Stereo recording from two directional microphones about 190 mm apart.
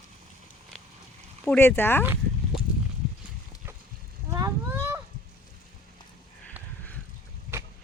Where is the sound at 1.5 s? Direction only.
10° left (ahead or behind).